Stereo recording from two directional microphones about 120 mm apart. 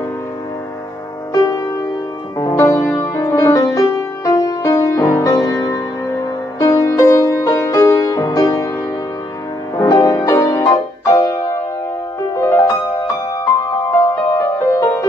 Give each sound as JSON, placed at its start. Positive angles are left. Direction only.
{"t": 1.3, "sound": "music", "side_deg": 30}
{"t": 9.8, "sound": "music", "side_deg": 25}
{"t": 13.9, "sound": "music", "side_deg": 25}